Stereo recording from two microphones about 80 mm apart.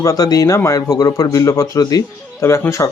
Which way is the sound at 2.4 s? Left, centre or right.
Left.